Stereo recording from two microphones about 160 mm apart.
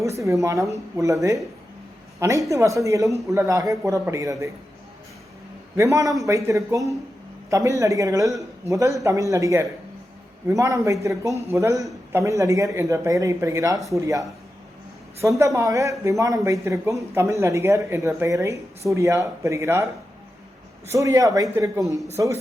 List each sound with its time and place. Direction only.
0.0 s a woman's voice: 20° right (ahead or behind)
5.7 s speech: 20° right (ahead or behind)
20.9 s speech: 20° right (ahead or behind)